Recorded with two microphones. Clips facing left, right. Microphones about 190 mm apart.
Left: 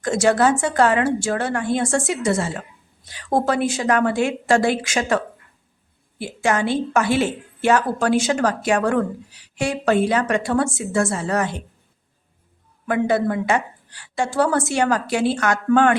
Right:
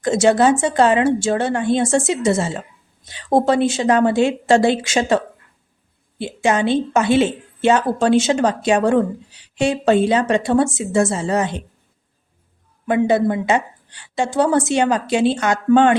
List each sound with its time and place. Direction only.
0.0 s a woman's voice: 20° right (ahead or behind)
12.8 s a woman's voice: 20° right (ahead or behind)